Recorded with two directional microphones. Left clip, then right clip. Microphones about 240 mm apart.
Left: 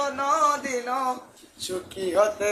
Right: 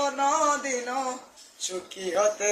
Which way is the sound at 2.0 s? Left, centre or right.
Centre.